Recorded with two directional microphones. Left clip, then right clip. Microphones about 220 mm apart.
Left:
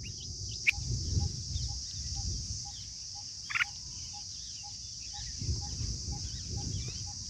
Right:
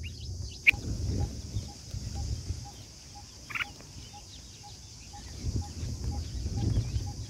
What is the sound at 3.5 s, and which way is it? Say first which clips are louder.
Turkey: left 3 dB; 20° right (ahead or behind).